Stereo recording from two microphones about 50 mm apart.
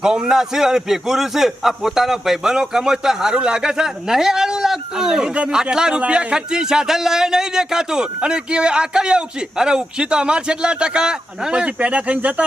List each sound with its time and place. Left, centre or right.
0.0 s speech: centre